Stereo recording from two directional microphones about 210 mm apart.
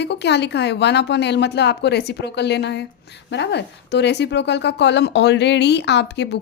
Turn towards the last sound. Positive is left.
turn(degrees=55)  # may be behind; listen again after turning